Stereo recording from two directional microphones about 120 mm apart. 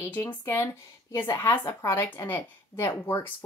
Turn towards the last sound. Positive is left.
turn(degrees=20)  # may be behind; listen again after turning